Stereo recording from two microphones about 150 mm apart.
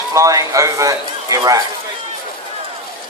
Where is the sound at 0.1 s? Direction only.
20° right (ahead or behind).